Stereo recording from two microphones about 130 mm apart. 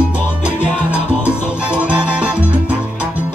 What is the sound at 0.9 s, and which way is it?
Salsa music, 10° right (ahead or behind).